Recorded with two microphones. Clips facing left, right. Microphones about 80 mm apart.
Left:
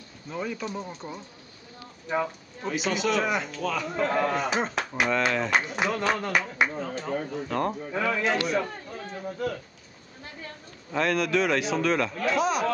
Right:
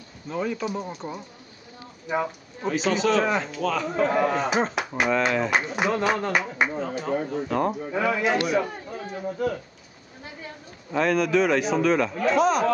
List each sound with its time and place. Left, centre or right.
0.3 s a man's voice: centre
0.8 s speech: centre
2.0 s speech: centre
2.7 s a man's voice: centre
8.5 s a sound: centre
10.2 s a man's voice: centre